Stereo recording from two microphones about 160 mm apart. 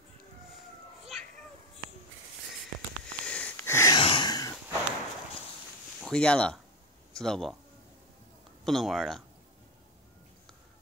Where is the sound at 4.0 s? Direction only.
30° left (ahead or behind).